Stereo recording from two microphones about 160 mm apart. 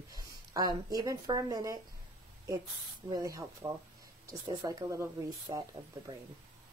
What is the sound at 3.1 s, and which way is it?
Speech, 20° right (ahead or behind).